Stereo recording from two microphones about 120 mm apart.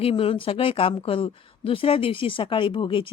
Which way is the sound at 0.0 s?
50° left (ahead or behind).